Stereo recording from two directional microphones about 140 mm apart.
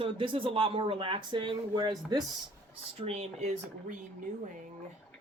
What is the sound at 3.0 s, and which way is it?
Speech, 50° right (ahead or behind).